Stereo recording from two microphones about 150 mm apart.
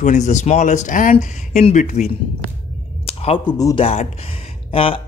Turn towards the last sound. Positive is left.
turn(degrees=40)  # may be behind; listen again after turning